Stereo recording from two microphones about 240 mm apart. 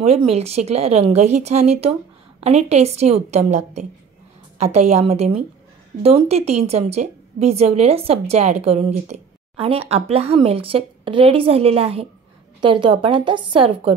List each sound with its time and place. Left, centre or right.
0.0 s a woman's voice: right